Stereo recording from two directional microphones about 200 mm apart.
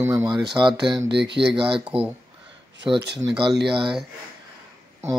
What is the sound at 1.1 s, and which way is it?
Speech, 60° right (ahead or behind).